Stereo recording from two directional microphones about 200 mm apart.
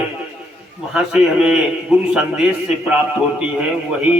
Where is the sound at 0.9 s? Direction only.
5° right (ahead or behind).